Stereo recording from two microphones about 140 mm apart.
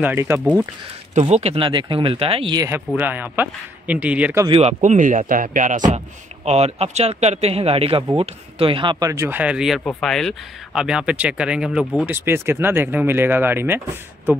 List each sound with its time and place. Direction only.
0.0 s speech: 15° right (ahead or behind)
1.2 s speech: 45° right (ahead or behind)
3.0 s speech: 15° right (ahead or behind)
4.5 s speech: 45° right (ahead or behind); by 5.8 s 70° right (ahead or behind)
5.9 s speech: 50° right (ahead or behind)
9.0 s speech: 20° right (ahead or behind)
9.8 s speech: 5° left (ahead or behind)
12.1 s speech: 15° right (ahead or behind)